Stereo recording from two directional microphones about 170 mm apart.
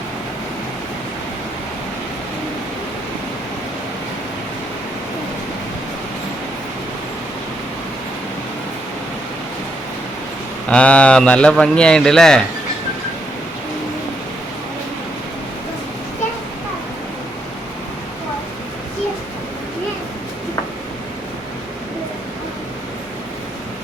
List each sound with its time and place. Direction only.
10.7 s a man's voice: 5° left (ahead or behind)